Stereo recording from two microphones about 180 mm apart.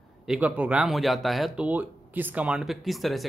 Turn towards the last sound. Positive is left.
turn(degrees=0)  # may be behind; listen again after turning